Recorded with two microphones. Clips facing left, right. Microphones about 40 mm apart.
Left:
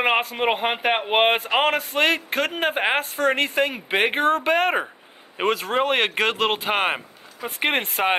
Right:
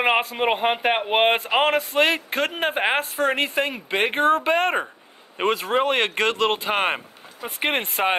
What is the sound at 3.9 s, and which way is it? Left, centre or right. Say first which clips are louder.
Speech: left 1 dB; centre.